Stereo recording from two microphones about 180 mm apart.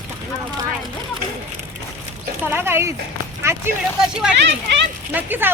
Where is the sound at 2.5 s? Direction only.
15° right (ahead or behind).